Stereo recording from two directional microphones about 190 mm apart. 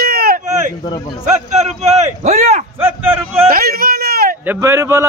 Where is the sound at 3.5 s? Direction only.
50° right (ahead or behind).